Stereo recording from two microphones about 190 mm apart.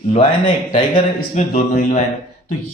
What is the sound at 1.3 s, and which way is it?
Speech, 40° left (ahead or behind).